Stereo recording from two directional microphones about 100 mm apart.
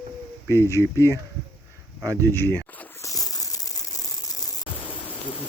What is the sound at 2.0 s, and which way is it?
Speech, 35° right (ahead or behind).